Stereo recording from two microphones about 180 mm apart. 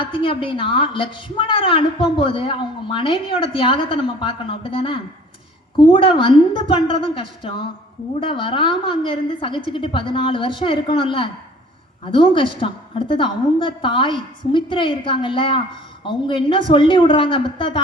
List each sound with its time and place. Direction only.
0.0 s a woman's voice: 30° left (ahead or behind)